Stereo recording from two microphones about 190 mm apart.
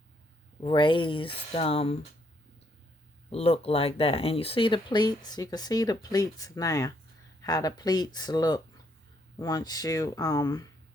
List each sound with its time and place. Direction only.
0.6 s speech: 25° left (ahead or behind)
3.2 s speech: 30° left (ahead or behind)